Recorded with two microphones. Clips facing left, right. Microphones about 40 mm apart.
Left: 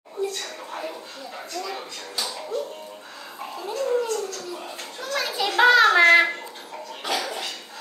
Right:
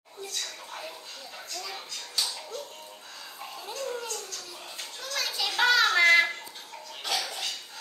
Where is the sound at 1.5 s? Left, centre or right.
Centre.